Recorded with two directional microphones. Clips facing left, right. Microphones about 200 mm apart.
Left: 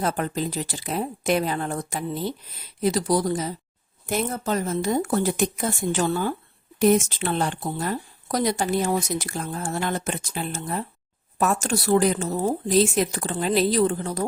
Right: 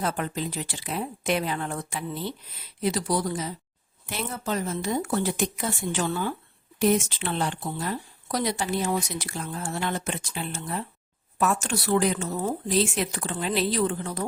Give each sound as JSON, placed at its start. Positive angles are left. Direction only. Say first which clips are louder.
{"t": 0.0, "sound": "speech", "louder": "left 3 dB", "side_deg": 40}